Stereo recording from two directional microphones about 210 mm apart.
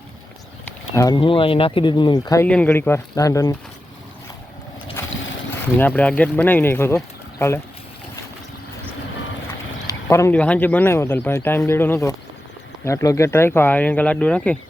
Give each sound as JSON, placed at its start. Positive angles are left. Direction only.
{"t": 0.6, "sound": "speech", "side_deg": 15}
{"t": 5.7, "sound": "speech", "side_deg": 10}
{"t": 9.8, "sound": "speech", "side_deg": 15}